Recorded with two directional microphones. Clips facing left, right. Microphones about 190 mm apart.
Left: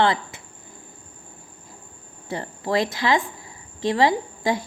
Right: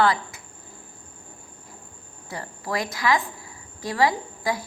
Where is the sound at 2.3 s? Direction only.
25° left (ahead or behind).